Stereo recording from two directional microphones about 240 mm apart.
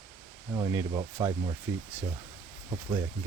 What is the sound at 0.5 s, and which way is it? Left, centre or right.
Speech, centre.